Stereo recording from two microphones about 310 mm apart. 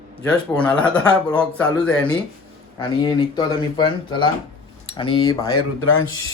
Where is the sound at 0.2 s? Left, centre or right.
Centre.